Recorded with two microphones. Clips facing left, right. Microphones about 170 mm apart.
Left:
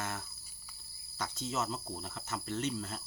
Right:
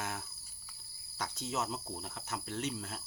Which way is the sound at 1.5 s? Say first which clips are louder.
Left 1 dB; centre (ahead or behind).